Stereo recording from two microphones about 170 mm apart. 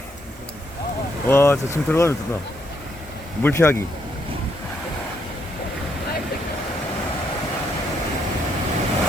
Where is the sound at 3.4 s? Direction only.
15° left (ahead or behind).